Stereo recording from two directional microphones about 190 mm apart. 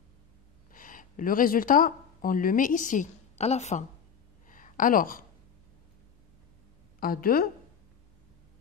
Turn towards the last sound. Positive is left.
turn(degrees=50)  # may be behind; listen again after turning